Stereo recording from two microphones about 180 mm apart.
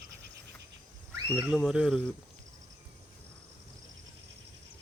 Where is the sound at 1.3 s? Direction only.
5° right (ahead or behind).